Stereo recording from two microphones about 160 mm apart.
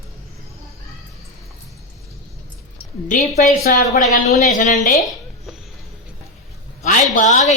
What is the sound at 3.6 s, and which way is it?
A woman's voice, 65° left (ahead or behind).